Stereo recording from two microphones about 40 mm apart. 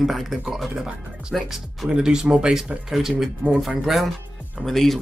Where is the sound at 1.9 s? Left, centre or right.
Centre.